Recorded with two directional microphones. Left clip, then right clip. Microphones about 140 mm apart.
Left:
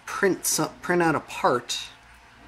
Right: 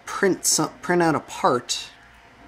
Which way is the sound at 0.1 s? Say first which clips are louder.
Right 2 dB; 25° right (ahead or behind).